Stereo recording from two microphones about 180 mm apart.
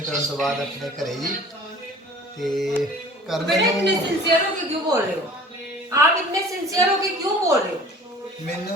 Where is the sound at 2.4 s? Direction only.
Centre (ahead or behind).